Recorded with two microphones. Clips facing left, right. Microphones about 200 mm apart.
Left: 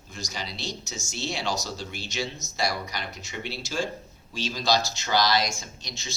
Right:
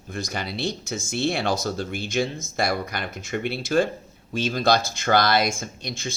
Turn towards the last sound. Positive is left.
turn(degrees=-55)  # may be behind; listen again after turning